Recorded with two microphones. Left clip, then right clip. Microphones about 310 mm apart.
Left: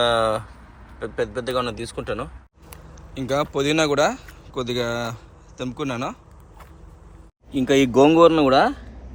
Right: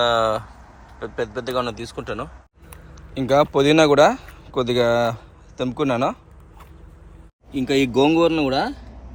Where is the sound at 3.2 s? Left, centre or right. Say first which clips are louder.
Right 6 dB; centre.